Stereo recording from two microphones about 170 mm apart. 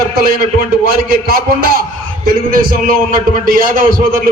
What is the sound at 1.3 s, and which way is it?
A man's voice, 60° right (ahead or behind).